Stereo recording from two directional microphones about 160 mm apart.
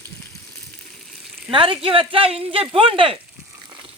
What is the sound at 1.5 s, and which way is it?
Speech, 35° right (ahead or behind).